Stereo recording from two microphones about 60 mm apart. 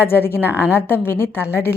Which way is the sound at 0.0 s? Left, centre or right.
Left.